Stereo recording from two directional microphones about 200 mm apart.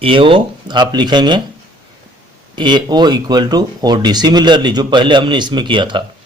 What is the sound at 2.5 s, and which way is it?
A man's voice, 20° right (ahead or behind).